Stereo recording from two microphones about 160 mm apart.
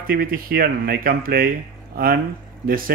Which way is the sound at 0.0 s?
65° right (ahead or behind).